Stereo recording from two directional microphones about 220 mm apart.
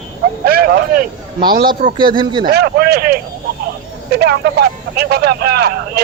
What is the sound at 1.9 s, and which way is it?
Speech, 20° right (ahead or behind).